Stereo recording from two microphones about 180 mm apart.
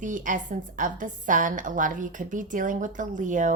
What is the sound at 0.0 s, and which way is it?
Speech, 45° right (ahead or behind).